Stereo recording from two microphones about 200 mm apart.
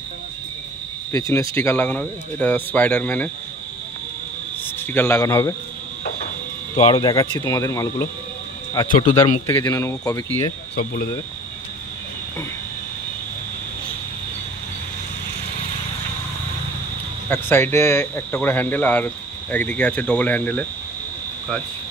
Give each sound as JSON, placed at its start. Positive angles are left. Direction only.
{"t": 1.1, "sound": "speech", "side_deg": 15}
{"t": 4.9, "sound": "speech", "side_deg": 10}
{"t": 6.8, "sound": "speech", "side_deg": 20}
{"t": 8.8, "sound": "speech", "side_deg": 45}
{"t": 9.5, "sound": "speech", "side_deg": 10}
{"t": 17.3, "sound": "speech", "side_deg": 10}